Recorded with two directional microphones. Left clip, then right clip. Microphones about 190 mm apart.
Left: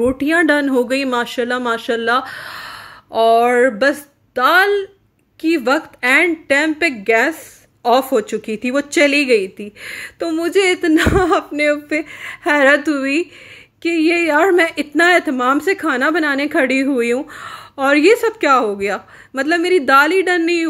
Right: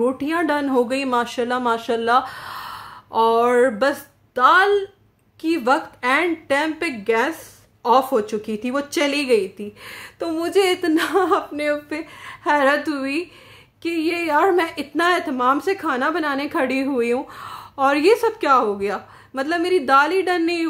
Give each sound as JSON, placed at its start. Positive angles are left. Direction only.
{"t": 0.0, "sound": "a woman's voice", "side_deg": 20}